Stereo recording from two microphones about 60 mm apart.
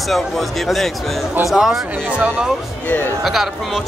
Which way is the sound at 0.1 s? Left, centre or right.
Centre.